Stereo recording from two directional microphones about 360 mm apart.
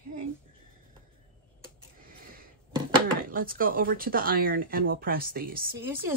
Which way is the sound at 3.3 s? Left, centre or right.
Right.